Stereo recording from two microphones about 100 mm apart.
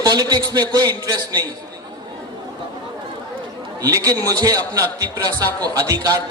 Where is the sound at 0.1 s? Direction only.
45° right (ahead or behind).